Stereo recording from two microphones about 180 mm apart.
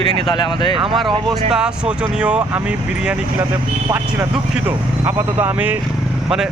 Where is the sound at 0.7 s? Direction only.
30° right (ahead or behind).